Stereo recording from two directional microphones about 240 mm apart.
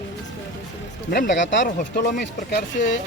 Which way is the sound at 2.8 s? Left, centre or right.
Left.